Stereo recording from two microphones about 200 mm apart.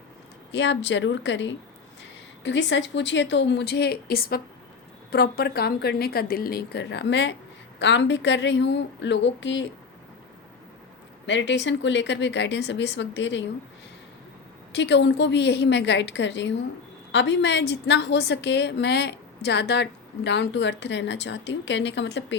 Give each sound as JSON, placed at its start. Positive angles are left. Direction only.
{"t": 0.5, "sound": "a woman's voice", "side_deg": 60}
{"t": 11.3, "sound": "a woman's voice", "side_deg": 65}
{"t": 14.7, "sound": "a woman's voice", "side_deg": 60}